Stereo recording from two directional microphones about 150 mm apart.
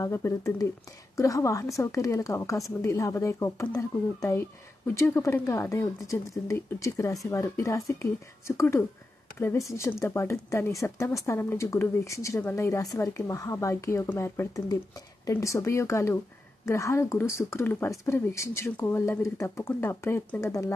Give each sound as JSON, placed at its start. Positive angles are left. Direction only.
{"t": 0.0, "sound": "speech", "side_deg": 20}